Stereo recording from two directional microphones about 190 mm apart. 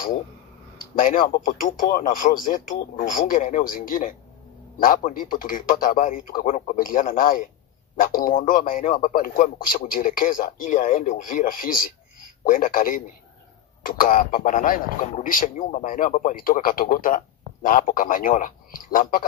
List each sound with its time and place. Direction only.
0.9 s a man's voice: 45° left (ahead or behind)